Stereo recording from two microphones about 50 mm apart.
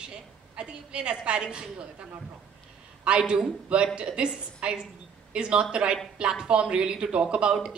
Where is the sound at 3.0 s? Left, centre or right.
Centre.